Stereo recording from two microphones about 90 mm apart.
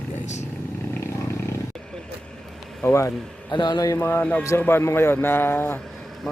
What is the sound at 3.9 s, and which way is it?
Speech, 25° left (ahead or behind).